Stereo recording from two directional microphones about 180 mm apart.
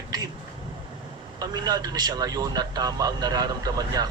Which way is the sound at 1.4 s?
20° right (ahead or behind).